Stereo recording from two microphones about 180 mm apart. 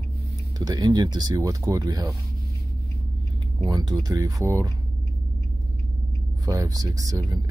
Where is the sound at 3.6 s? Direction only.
20° right (ahead or behind).